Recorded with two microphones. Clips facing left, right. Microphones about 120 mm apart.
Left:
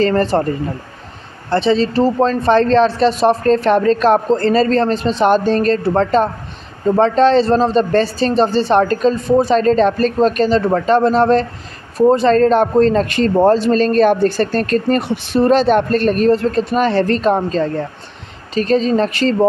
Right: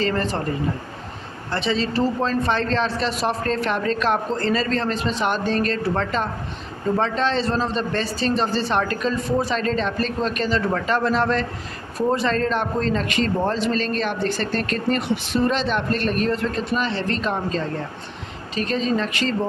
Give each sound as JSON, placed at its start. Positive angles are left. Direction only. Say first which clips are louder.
{"t": 0.0, "sound": "a man's voice", "louder": "left 9 dB", "side_deg": 40}
{"t": 1.5, "sound": "a man's voice", "louder": "left 9 dB", "side_deg": 30}